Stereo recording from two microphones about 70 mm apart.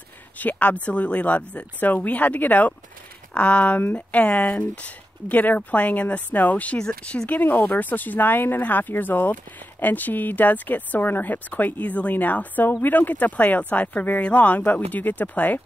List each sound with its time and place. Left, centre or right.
0.4 s speech: left